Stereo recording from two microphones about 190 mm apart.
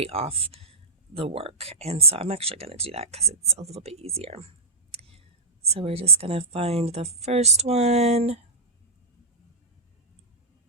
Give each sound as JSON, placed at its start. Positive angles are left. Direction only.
{"t": 0.0, "sound": "speech", "side_deg": -30}